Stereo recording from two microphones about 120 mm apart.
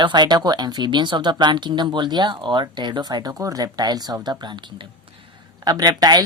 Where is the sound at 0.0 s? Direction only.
40° right (ahead or behind).